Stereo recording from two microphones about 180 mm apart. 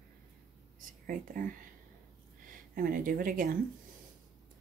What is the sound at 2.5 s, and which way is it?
Speech, 50° right (ahead or behind).